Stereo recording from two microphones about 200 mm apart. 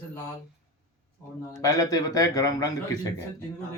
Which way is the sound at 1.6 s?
15° left (ahead or behind).